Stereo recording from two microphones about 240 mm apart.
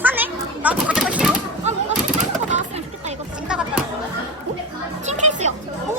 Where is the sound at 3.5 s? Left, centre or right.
Centre.